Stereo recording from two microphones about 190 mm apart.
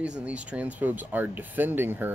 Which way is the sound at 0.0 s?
5° right (ahead or behind).